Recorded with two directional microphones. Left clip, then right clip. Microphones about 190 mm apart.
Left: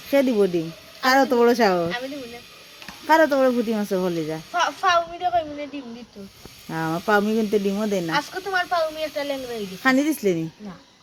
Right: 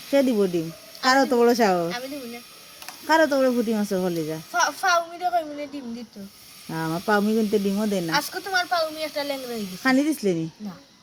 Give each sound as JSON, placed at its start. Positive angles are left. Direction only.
{"t": 0.1, "sound": "speech", "side_deg": 0}
{"t": 3.1, "sound": "speech", "side_deg": 0}
{"t": 6.7, "sound": "speech", "side_deg": 0}
{"t": 9.8, "sound": "speech", "side_deg": 0}